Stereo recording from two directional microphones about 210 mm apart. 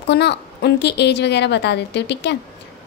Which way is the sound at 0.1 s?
50° left (ahead or behind).